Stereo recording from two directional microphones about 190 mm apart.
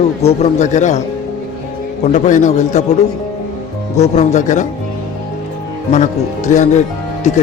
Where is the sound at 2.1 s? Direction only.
40° left (ahead or behind).